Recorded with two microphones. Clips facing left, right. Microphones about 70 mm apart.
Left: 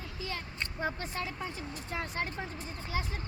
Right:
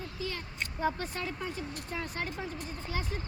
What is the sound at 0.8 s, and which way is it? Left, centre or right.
Speech, left.